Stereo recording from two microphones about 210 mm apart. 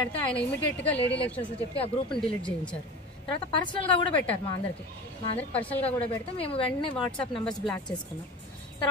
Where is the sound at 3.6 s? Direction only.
20° left (ahead or behind).